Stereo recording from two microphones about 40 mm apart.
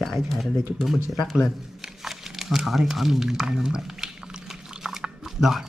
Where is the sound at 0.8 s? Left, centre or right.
Centre.